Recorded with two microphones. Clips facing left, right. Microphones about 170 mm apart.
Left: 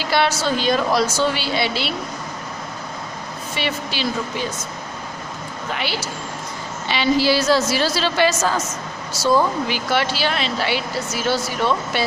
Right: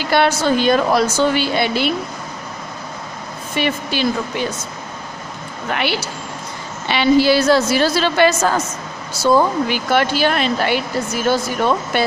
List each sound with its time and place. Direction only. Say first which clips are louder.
0.0 s speech: right 4 dB; 55° right (ahead or behind)
3.5 s speech: right 5 dB; 50° right (ahead or behind)
5.7 s a woman's voice: right 5 dB; 65° right (ahead or behind)